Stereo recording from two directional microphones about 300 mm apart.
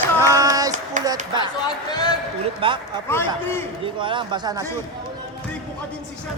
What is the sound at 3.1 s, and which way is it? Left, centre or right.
Speech, centre.